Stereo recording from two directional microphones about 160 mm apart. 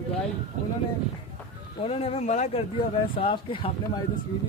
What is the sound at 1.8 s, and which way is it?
Speech, 35° left (ahead or behind).